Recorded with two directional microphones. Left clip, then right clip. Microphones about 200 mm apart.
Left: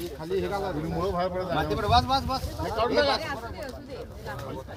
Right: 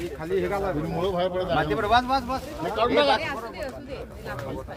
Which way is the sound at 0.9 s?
30° right (ahead or behind).